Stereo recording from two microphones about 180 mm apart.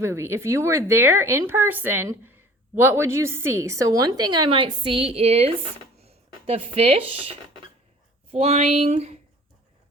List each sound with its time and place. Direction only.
0.0 s a woman's voice: 15° right (ahead or behind); by 5.5 s 35° right (ahead or behind)
6.0 s a sound: 35° right (ahead or behind)
8.3 s speech: 35° right (ahead or behind)